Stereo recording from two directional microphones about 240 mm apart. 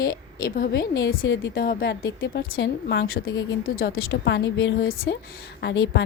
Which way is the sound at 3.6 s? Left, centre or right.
Left.